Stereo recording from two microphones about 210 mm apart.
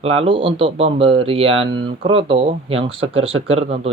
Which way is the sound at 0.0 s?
30° right (ahead or behind).